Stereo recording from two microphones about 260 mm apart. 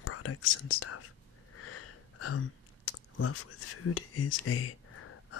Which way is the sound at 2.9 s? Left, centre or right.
Left.